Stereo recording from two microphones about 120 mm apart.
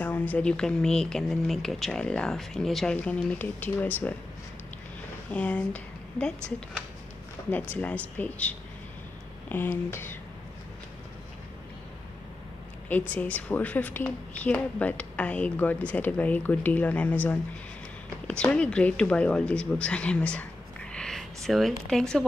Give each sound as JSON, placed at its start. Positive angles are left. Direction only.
{"t": 0.0, "sound": "speech", "side_deg": 15}
{"t": 5.3, "sound": "speech", "side_deg": 10}
{"t": 7.7, "sound": "speech", "side_deg": 10}
{"t": 13.1, "sound": "speech", "side_deg": 15}
{"t": 18.4, "sound": "speech", "side_deg": 10}